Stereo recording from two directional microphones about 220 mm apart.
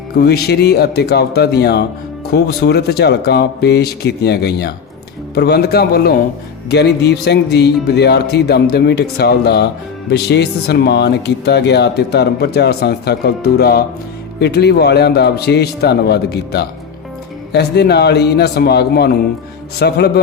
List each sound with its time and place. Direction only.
0.2 s speech: 45° left (ahead or behind)